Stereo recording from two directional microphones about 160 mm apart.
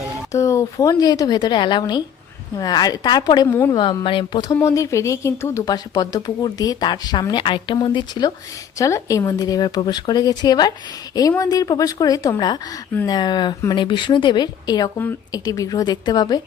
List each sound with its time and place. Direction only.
0.3 s speech: 20° left (ahead or behind)
4.0 s speech: 35° left (ahead or behind)
4.5 s speech: 20° left (ahead or behind)